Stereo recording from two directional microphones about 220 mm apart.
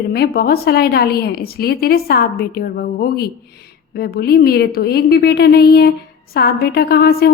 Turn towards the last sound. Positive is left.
turn(degrees=45)  # may be behind; listen again after turning